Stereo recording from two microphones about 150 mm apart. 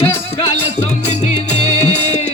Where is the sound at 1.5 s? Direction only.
45° left (ahead or behind).